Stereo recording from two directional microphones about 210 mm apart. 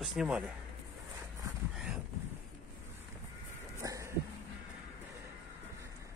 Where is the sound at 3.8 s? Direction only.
15° right (ahead or behind).